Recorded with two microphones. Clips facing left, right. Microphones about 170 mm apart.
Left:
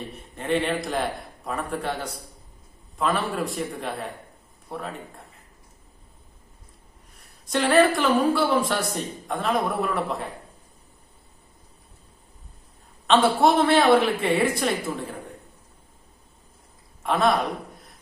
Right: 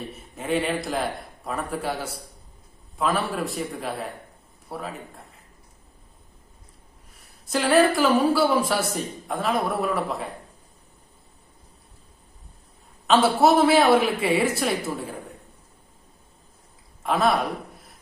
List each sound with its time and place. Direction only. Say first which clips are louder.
0.2 s speech: left 1 dB; 5° right (ahead or behind)
7.2 s speech: left 1 dB; centre (ahead or behind)
13.1 s speech: right 1 dB; 5° right (ahead or behind)
17.0 s a sound: even; centre (ahead or behind)